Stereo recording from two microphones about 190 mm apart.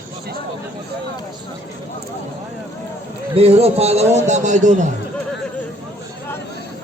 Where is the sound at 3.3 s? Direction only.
30° right (ahead or behind).